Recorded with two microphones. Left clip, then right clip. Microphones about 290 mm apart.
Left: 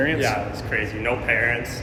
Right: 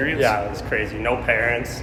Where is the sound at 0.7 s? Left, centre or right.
Centre.